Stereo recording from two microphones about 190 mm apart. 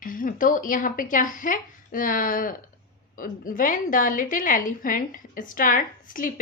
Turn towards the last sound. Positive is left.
turn(degrees=45)  # may be behind; listen again after turning